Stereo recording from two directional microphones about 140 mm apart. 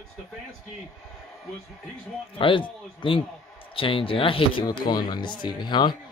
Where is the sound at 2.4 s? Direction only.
40° left (ahead or behind).